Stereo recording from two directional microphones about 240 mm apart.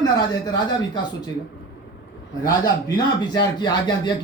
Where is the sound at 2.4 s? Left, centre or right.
Centre.